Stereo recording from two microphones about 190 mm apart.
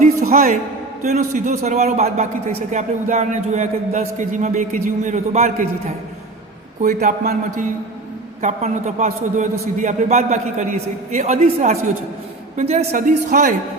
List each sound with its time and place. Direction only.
0.0 s music: 45° right (ahead or behind)
1.0 s a man's voice: 40° right (ahead or behind)
6.8 s a man's voice: 40° right (ahead or behind)